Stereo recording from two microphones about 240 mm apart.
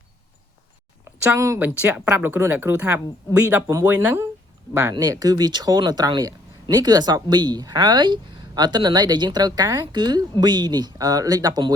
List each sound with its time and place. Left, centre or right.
1.2 s speech: centre